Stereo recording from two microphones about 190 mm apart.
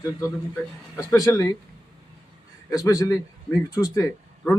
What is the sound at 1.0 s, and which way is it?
Speech, 15° left (ahead or behind).